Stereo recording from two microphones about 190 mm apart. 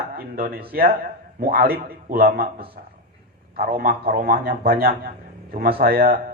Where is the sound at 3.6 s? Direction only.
50° right (ahead or behind).